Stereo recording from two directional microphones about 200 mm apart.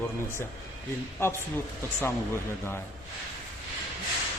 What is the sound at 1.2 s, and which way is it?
Speech, 10° left (ahead or behind).